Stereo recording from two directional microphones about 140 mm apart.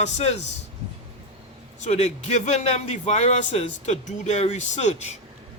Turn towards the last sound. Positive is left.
turn(degrees=55)  # may be behind; listen again after turning